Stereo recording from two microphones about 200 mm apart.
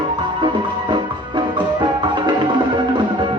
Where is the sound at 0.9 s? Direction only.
25° right (ahead or behind).